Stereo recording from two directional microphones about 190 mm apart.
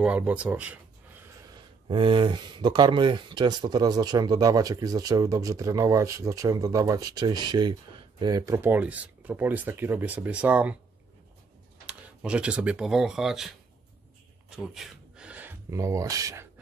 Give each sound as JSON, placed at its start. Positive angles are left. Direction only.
{"t": 0.0, "sound": "speech", "side_deg": -5}
{"t": 1.9, "sound": "speech", "side_deg": -25}
{"t": 11.8, "sound": "speech", "side_deg": -5}
{"t": 14.5, "sound": "speech", "side_deg": 0}